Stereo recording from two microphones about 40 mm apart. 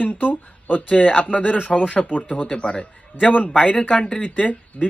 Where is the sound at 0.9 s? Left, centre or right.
Left.